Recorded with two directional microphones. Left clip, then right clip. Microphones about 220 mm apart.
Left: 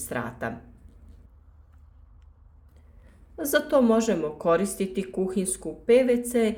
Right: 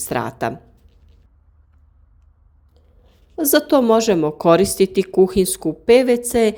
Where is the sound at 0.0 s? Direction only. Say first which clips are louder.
Right 9 dB; 40° right (ahead or behind).